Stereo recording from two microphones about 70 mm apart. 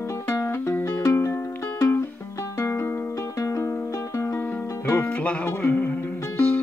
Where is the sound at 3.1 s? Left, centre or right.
Left.